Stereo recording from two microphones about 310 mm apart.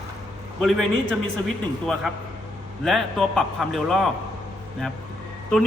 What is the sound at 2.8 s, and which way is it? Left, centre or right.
A man's voice, centre.